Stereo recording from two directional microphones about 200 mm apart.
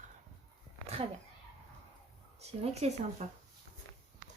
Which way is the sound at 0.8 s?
30° right (ahead or behind).